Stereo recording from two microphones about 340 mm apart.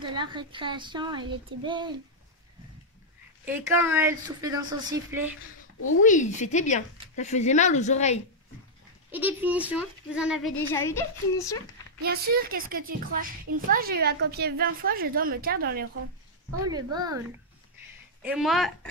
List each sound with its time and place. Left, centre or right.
0.0 s a woman's voice: centre
3.4 s a woman's voice: centre
5.8 s speech: left
6.0 s a woman's voice: left
9.1 s a child's voice: centre
12.0 s a woman's voice: right
16.6 s a woman's voice: centre
18.2 s a child's voice: centre